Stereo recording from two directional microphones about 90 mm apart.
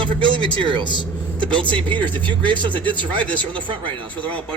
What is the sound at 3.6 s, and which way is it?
Speech, 70° right (ahead or behind).